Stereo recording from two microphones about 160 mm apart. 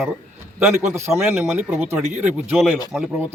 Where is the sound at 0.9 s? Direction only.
15° right (ahead or behind).